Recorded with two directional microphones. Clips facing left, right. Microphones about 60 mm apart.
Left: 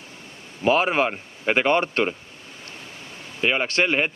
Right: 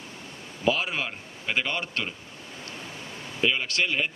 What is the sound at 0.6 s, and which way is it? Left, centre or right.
A man's voice, left.